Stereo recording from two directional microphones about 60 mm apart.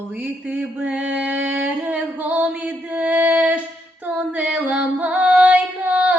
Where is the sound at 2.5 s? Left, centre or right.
Right.